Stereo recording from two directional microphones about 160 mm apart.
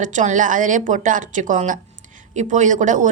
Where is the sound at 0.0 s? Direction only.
50° right (ahead or behind).